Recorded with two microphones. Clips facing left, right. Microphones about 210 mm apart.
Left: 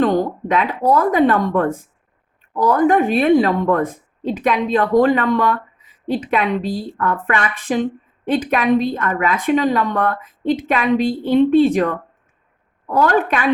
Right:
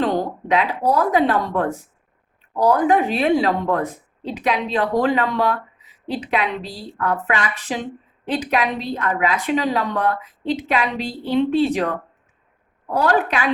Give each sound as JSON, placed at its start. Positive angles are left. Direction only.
{"t": 0.0, "sound": "a woman's voice", "side_deg": 50}